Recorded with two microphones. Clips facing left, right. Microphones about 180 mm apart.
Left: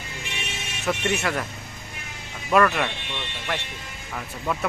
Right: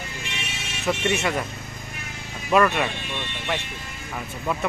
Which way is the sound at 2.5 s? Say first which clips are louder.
Even; 5° right (ahead or behind).